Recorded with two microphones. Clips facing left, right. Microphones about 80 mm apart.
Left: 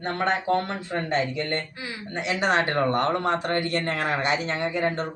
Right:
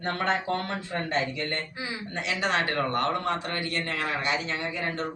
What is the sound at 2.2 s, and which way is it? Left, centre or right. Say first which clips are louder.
A man's voice: left 4 dB; left.